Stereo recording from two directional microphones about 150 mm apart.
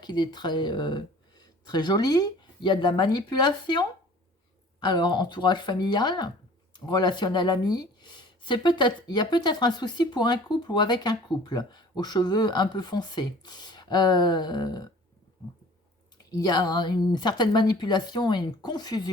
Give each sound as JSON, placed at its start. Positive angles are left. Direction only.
{"t": 0.0, "sound": "speech", "side_deg": 30}
{"t": 16.1, "sound": "speech", "side_deg": 25}